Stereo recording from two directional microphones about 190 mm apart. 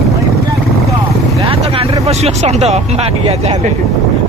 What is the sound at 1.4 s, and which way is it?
Vehicle, 30° right (ahead or behind).